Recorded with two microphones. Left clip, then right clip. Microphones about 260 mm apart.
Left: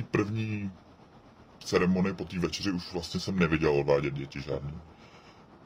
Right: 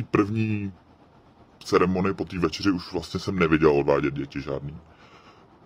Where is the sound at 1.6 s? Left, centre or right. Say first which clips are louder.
Right 6 dB; right.